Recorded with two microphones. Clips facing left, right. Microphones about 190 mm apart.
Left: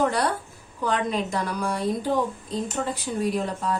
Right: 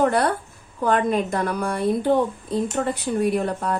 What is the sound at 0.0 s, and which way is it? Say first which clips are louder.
Speech: right 4 dB; 55° right (ahead or behind).